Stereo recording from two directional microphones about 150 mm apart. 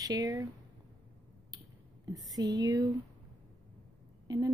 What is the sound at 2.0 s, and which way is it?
Speech, 25° right (ahead or behind).